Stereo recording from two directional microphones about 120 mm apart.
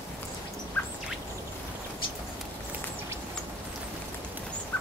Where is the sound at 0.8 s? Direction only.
20° left (ahead or behind).